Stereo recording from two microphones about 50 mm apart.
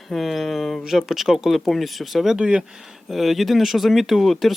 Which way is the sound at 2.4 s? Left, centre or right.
Right.